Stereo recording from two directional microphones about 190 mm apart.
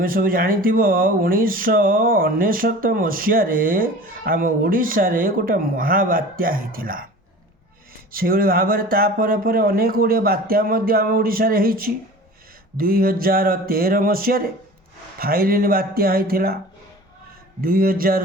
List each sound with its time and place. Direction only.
0.0 s speech: 50° right (ahead or behind)
8.1 s speech: 50° right (ahead or behind)
17.6 s speech: 50° right (ahead or behind)